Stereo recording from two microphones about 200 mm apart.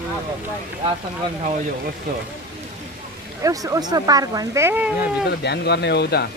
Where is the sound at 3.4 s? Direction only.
15° right (ahead or behind).